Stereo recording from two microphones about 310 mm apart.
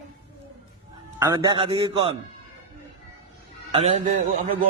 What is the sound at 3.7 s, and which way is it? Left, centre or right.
Speech, centre.